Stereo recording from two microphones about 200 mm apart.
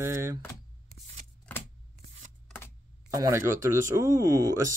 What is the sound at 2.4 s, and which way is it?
Shuffling cards, 10° left (ahead or behind).